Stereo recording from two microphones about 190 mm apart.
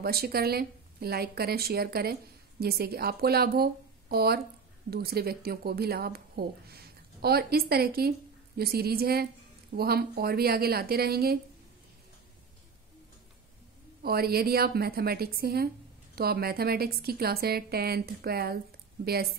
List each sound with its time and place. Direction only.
0.0 s speech: 55° right (ahead or behind)
14.0 s a woman's voice: 55° right (ahead or behind)